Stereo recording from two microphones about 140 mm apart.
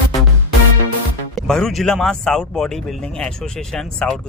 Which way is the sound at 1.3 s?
5° left (ahead or behind).